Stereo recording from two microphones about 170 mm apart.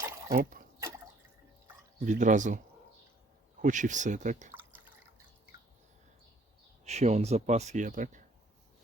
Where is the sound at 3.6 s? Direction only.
50° right (ahead or behind).